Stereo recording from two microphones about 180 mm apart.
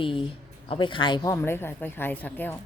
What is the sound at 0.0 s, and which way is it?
Speech, 30° left (ahead or behind).